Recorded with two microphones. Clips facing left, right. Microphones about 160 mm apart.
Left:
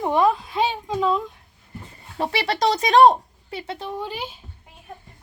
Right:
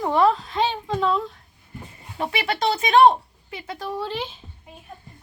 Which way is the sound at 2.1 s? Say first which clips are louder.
Left 2 dB; 35° left (ahead or behind).